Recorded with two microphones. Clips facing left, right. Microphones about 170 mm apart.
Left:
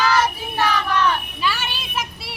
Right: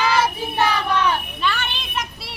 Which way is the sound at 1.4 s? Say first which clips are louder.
Even; 5° left (ahead or behind).